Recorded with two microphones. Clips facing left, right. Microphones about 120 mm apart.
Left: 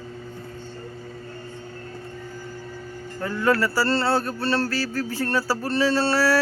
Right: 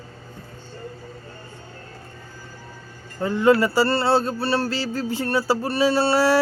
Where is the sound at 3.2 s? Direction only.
20° right (ahead or behind).